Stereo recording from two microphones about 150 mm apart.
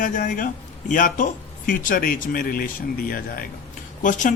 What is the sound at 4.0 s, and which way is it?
Speech, 60° left (ahead or behind).